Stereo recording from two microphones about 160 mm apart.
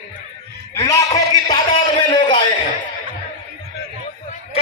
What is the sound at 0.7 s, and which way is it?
Speech, 20° left (ahead or behind).